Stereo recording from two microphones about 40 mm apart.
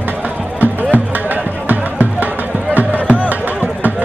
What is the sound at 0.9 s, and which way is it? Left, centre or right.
Music, right.